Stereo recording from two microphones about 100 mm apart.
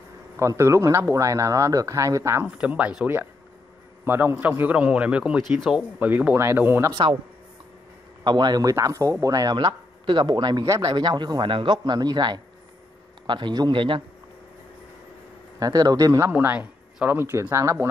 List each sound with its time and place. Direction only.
0.4 s speech: 30° right (ahead or behind)
2.4 s a man's voice: 15° right (ahead or behind)
4.0 s a man's voice: 20° right (ahead or behind)
5.4 s speech: centre (ahead or behind)
5.9 s speech: 20° right (ahead or behind)
8.2 s a man's voice: 45° right (ahead or behind)
9.6 s a man's voice: 50° right (ahead or behind)
10.6 s a man's voice: 35° right (ahead or behind); by 14.0 s 55° right (ahead or behind)
15.6 s speech: 40° right (ahead or behind)
16.3 s speech: 15° right (ahead or behind)
17.3 s speech: 30° right (ahead or behind)